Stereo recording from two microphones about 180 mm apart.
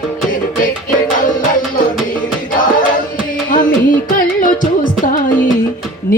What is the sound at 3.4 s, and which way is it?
Music, 50° left (ahead or behind).